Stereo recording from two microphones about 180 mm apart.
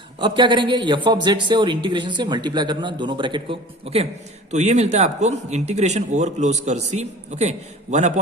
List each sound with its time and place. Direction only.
0.2 s speech: 25° right (ahead or behind)